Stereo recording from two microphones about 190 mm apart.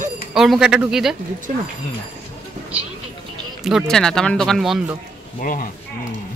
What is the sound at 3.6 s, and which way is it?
Speech, centre (ahead or behind).